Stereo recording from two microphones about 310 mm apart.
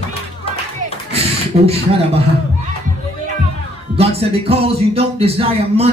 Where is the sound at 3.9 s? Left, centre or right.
Centre.